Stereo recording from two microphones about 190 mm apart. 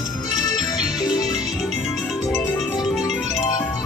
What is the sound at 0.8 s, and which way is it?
Music, centre (ahead or behind).